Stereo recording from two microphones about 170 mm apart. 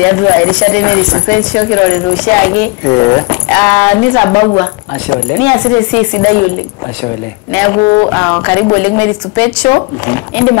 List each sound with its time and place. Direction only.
0.0 s speech: 15° left (ahead or behind)
2.9 s speech: 25° left (ahead or behind)
7.5 s speech: 15° left (ahead or behind)